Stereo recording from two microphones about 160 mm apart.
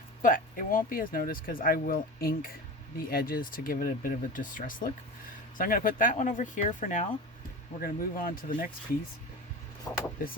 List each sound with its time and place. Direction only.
0.2 s speech: 60° left (ahead or behind)
7.8 s speech: 65° left (ahead or behind)
9.9 s speech: 20° left (ahead or behind)